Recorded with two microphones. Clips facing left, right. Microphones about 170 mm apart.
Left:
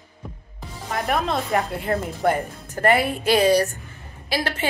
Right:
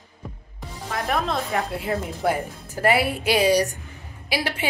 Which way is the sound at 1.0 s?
Centre (ahead or behind).